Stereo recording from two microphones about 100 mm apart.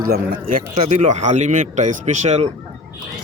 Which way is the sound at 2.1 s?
90° right.